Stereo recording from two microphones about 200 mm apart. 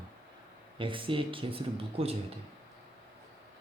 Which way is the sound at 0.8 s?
25° right (ahead or behind).